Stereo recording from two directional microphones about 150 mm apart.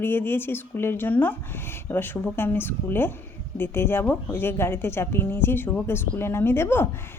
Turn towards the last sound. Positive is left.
turn(degrees=15)  # may be behind; listen again after turning